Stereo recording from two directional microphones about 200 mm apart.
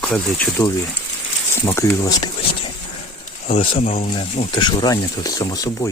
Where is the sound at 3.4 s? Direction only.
30° left (ahead or behind).